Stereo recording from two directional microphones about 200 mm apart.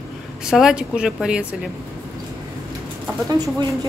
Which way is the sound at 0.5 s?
5° right (ahead or behind).